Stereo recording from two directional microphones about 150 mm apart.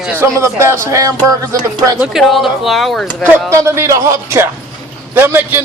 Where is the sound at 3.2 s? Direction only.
15° right (ahead or behind).